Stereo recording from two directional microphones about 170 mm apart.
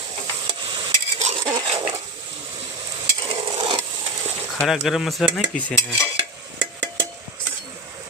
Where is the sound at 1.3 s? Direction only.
30° right (ahead or behind).